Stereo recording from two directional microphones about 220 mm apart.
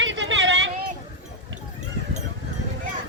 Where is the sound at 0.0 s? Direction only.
55° right (ahead or behind).